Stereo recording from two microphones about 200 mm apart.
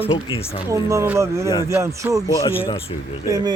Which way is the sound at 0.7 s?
15° right (ahead or behind).